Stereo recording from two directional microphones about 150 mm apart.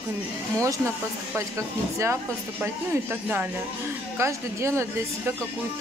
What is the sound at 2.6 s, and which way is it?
Speech, 15° right (ahead or behind).